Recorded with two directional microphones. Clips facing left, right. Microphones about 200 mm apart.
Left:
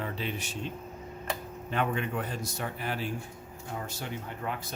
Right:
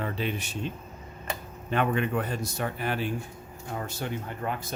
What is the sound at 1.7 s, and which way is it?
A man's voice, 65° right (ahead or behind).